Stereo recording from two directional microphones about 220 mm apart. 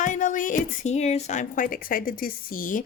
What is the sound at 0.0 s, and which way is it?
Speech, 35° left (ahead or behind).